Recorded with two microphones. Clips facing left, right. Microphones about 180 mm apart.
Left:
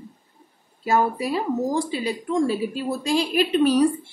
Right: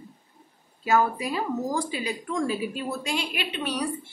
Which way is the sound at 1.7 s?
30° left (ahead or behind).